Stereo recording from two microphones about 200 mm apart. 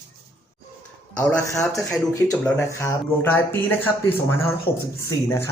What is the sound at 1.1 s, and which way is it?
Speech, 5° left (ahead or behind).